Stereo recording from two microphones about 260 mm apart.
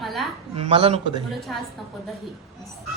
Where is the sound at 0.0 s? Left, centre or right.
Centre.